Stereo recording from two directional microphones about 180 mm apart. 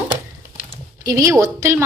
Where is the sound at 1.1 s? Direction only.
20° right (ahead or behind).